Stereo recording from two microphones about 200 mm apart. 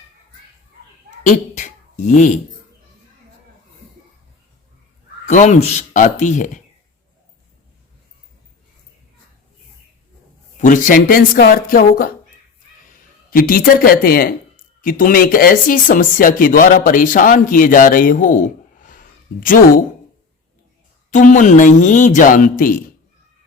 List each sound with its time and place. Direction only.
1.2 s speech: 40° left (ahead or behind)
5.2 s speech: 35° left (ahead or behind)
10.6 s speech: 40° left (ahead or behind)
21.1 s speech: 40° left (ahead or behind)